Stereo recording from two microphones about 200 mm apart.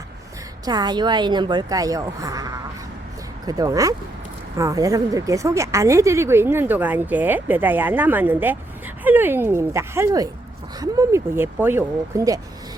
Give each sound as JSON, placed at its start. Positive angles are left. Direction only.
{"t": 0.6, "sound": "speech", "side_deg": -20}